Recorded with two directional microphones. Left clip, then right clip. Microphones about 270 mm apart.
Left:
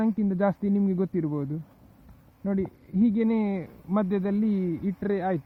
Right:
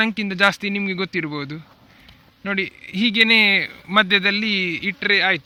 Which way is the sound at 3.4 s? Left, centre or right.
Right.